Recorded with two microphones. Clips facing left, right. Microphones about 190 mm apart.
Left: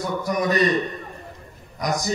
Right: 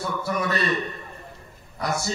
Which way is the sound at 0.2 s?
15° left (ahead or behind).